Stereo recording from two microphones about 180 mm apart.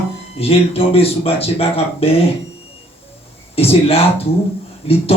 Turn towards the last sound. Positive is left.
turn(degrees=35)  # may be behind; listen again after turning